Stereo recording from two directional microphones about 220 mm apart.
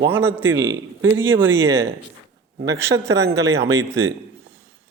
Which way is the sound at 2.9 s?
15° right (ahead or behind).